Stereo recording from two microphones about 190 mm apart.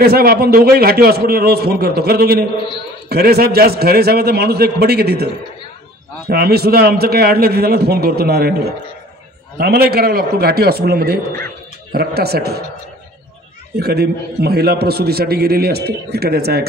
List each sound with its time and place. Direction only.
0.0 s a man's voice: 55° right (ahead or behind)
9.6 s a man's voice: 55° right (ahead or behind)
13.7 s a man's voice: 55° right (ahead or behind)